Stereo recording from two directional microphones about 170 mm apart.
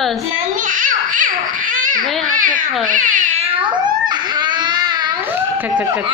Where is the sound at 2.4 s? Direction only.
50° right (ahead or behind); by 5.1 s 25° right (ahead or behind).